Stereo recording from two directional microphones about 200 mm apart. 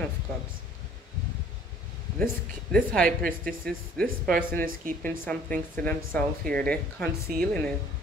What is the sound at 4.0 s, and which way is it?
Speech, 5° left (ahead or behind).